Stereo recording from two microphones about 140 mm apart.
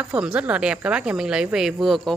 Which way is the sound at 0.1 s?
10° right (ahead or behind).